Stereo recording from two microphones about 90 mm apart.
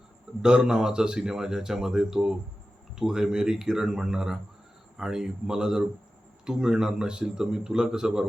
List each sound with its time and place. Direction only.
0.4 s a man's voice: 5° right (ahead or behind)